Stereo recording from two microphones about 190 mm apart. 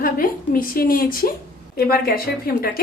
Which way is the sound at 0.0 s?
45° left (ahead or behind).